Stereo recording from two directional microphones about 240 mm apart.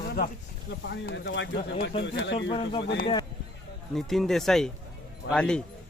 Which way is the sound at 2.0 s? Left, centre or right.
Left.